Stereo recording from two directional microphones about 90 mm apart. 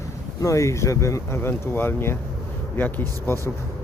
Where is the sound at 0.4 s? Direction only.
35° left (ahead or behind).